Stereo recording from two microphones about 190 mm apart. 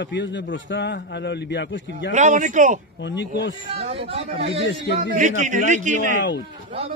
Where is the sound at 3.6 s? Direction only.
30° right (ahead or behind).